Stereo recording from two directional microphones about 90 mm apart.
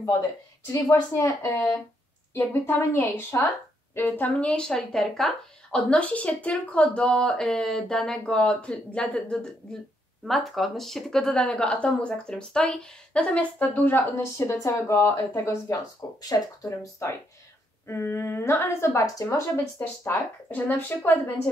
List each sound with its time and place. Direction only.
0.7 s speech: 35° left (ahead or behind)
14.2 s speech: 35° left (ahead or behind)
17.8 s speech: 30° left (ahead or behind)
20.1 s speech: 20° left (ahead or behind)